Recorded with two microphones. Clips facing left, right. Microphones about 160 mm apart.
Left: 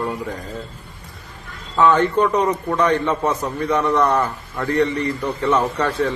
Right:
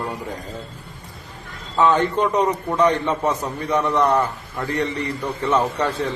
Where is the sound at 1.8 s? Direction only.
15° right (ahead or behind).